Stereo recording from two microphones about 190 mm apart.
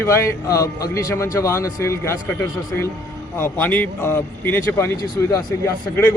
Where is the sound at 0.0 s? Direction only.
15° left (ahead or behind).